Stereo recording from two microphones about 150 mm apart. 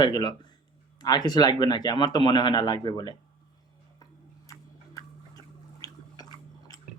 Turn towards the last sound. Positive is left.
turn(degrees=25)  # may be behind; listen again after turning